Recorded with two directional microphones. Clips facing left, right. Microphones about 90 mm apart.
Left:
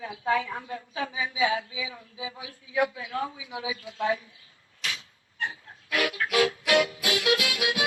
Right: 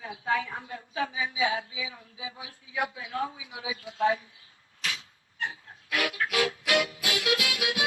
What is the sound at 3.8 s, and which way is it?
Speech, 30° right (ahead or behind).